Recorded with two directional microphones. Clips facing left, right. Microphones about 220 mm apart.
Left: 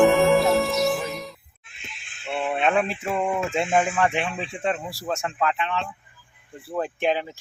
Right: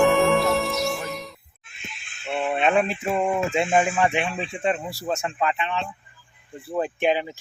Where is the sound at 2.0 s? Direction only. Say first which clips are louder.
Right 1 dB; 30° left (ahead or behind).